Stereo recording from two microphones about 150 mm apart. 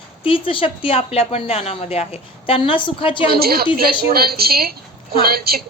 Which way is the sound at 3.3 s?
90° right.